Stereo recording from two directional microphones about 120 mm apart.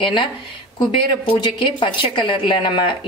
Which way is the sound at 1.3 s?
40° left (ahead or behind).